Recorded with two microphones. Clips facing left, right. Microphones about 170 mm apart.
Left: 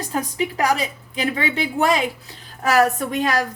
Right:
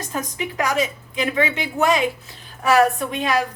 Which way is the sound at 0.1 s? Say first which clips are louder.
Left 5 dB; 35° left (ahead or behind).